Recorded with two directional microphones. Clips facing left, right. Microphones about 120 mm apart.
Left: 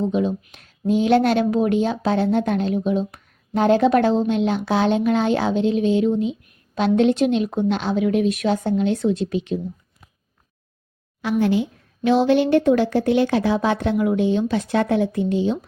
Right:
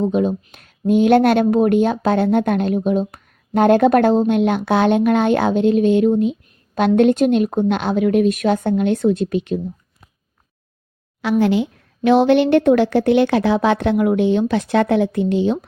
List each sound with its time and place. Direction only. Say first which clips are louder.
0.0 s a woman's voice: right 3 dB; 50° right (ahead or behind)
11.2 s speech: right 3 dB; 90° right; by 15.5 s 75° right (ahead or behind)